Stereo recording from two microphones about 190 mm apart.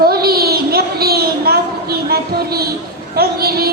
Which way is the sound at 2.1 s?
55° right (ahead or behind).